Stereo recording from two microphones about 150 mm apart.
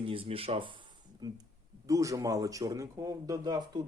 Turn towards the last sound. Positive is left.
turn(degrees=-30)  # may be behind; listen again after turning